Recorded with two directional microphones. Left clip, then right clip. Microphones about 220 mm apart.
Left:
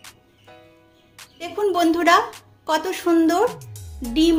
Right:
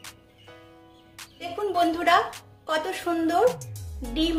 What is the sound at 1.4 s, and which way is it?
A woman's voice, 40° left (ahead or behind).